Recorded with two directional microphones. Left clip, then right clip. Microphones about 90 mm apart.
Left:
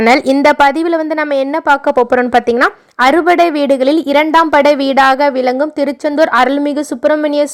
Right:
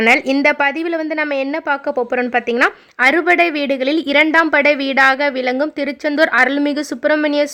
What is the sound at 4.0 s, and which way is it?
A woman's voice, 20° left (ahead or behind).